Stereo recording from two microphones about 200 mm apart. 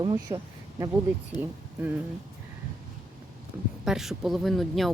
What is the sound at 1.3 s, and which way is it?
Speech, 20° left (ahead or behind).